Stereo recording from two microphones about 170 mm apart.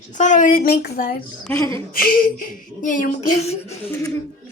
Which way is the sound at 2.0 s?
55° left (ahead or behind).